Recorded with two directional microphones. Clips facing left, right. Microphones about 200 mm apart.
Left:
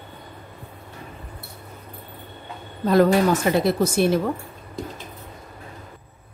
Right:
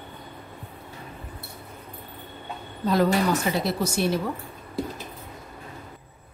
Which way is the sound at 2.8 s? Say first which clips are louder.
Left 5 dB; 55° left (ahead or behind).